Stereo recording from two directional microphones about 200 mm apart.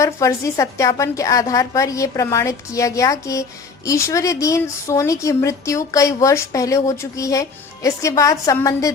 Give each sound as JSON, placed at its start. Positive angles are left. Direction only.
{"t": 0.0, "sound": "speech", "side_deg": 15}